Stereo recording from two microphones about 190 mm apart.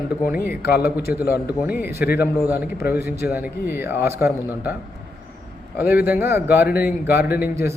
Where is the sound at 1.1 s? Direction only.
55° left (ahead or behind).